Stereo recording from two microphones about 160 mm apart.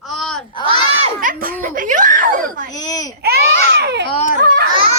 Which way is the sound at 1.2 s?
60° right (ahead or behind).